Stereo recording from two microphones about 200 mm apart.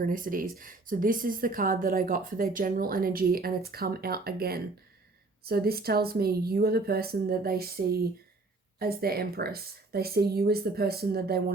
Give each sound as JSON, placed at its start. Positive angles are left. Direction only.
{"t": 0.0, "sound": "speech", "side_deg": -45}